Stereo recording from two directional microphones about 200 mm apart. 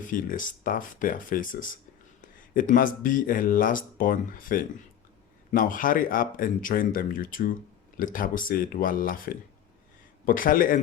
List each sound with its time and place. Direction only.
0.0 s speech: 40° left (ahead or behind)